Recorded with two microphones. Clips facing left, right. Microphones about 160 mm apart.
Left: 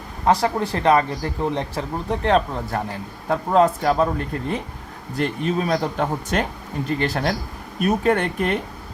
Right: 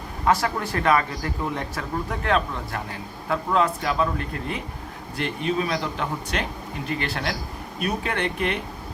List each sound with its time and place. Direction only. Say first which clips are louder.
0.3 s speech: left 3 dB; 30° left (ahead or behind)